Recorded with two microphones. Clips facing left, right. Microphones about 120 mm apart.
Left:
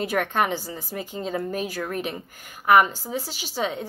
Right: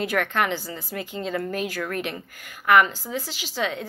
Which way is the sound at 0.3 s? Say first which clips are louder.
Left 1 dB; 15° left (ahead or behind).